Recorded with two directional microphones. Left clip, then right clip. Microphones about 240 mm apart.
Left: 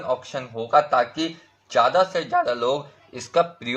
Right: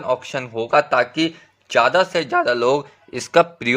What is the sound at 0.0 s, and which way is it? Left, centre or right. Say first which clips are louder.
A man's voice: right 4 dB; right.